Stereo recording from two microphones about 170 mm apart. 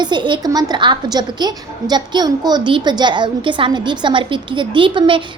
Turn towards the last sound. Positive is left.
turn(degrees=-30)  # may be behind; listen again after turning